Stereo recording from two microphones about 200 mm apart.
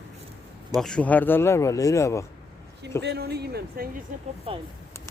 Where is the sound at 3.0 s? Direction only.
55° right (ahead or behind).